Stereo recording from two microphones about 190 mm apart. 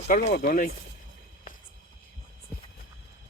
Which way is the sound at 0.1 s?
45° left (ahead or behind).